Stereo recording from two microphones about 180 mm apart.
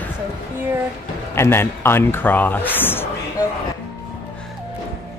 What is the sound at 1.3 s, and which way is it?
A man's voice, 15° left (ahead or behind).